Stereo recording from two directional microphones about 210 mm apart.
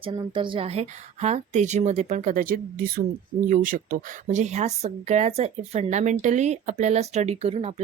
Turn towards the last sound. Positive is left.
turn(degrees=-30)  # may be behind; listen again after turning